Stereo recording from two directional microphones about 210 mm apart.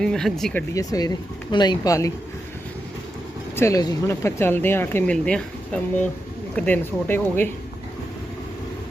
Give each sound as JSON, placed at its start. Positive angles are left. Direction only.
{"t": 0.0, "sound": "speech", "side_deg": 0}
{"t": 0.7, "sound": "speech", "side_deg": 15}
{"t": 3.5, "sound": "speech", "side_deg": 15}